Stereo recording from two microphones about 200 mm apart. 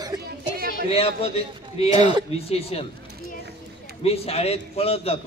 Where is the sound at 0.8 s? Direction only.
30° left (ahead or behind).